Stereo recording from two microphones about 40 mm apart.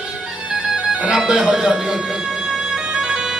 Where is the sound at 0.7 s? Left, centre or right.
Centre.